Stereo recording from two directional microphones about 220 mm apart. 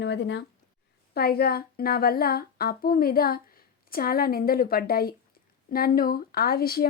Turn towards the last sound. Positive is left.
turn(degrees=45)  # may be behind; listen again after turning